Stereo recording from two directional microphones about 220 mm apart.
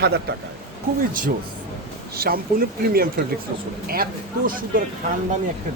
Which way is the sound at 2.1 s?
45° right (ahead or behind).